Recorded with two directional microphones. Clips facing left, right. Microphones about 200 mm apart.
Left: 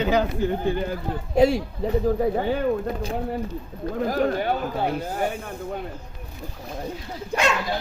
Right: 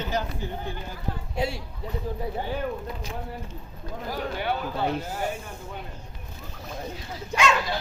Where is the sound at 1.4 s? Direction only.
90° left.